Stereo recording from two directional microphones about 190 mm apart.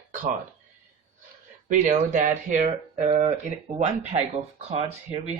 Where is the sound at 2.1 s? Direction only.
45° right (ahead or behind).